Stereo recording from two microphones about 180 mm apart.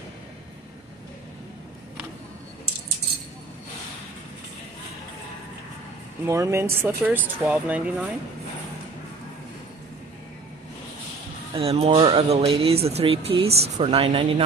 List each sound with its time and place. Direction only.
6.2 s speech: 15° right (ahead or behind)
11.5 s speech: 35° right (ahead or behind)